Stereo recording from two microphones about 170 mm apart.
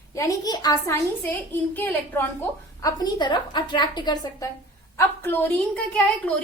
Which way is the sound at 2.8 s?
25° left (ahead or behind).